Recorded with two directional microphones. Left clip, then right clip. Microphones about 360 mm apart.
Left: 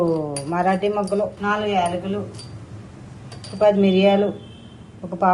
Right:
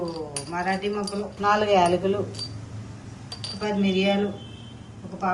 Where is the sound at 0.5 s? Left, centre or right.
Centre.